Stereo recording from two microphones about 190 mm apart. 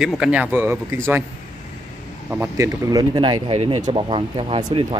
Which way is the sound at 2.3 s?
15° right (ahead or behind).